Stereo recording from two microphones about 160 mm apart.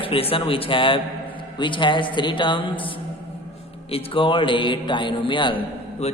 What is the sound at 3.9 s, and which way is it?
A man's voice, 30° left (ahead or behind).